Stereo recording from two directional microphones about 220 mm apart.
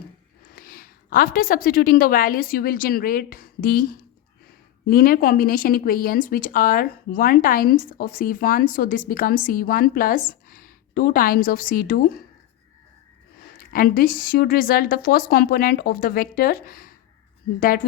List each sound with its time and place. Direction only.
0.5 s a woman's voice: 40° left (ahead or behind)
4.9 s speech: 40° left (ahead or behind)
13.6 s a woman's voice: 40° left (ahead or behind)